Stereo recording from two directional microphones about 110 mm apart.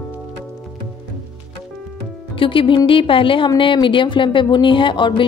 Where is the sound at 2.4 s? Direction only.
50° left (ahead or behind).